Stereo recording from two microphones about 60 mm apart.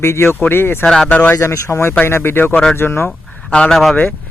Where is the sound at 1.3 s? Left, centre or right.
Left.